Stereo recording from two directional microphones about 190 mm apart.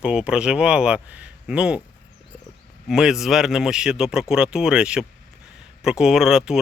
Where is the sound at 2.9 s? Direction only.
Centre (ahead or behind).